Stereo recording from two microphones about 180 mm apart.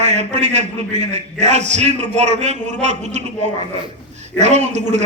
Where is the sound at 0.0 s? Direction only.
40° right (ahead or behind).